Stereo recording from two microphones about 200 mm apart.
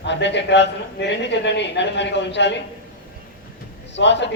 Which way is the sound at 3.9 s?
60° left (ahead or behind).